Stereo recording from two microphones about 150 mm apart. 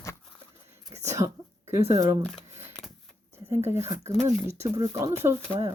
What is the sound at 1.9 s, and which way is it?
Speech, 20° right (ahead or behind).